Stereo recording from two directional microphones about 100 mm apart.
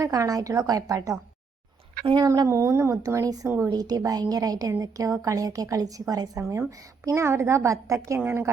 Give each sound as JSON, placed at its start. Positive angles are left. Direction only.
{"t": 0.0, "sound": "a woman's voice", "side_deg": -35}